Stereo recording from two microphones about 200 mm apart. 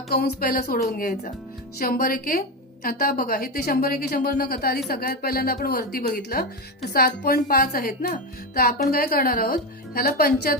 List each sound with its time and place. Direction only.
0.1 s a woman's voice: 50° left (ahead or behind)